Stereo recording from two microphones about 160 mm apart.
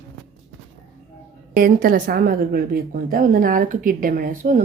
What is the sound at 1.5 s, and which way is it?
A woman's voice, 60° right (ahead or behind).